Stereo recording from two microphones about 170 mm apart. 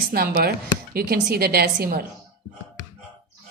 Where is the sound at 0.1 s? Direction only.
65° right (ahead or behind).